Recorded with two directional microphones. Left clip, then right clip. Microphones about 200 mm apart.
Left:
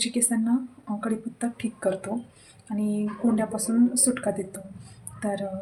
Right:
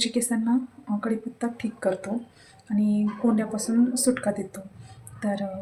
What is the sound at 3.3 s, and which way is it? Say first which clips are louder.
Speech: even; centre (ahead or behind).